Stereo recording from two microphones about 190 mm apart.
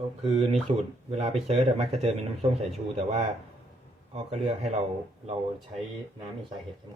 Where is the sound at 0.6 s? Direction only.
35° right (ahead or behind).